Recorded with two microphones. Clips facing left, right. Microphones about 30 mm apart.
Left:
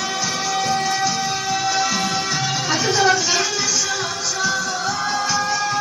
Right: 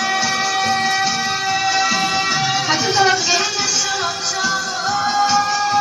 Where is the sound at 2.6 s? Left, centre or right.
Centre.